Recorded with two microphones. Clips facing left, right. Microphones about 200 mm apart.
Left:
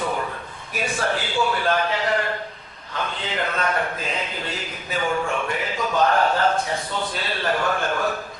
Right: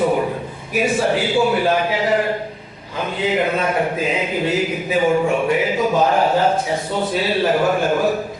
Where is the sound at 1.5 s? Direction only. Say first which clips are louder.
Right 5 dB; 10° right (ahead or behind).